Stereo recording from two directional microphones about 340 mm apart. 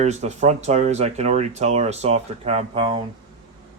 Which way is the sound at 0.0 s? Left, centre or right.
Centre.